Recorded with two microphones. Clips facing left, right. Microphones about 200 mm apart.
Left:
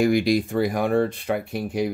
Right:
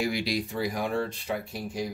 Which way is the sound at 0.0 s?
50° left (ahead or behind).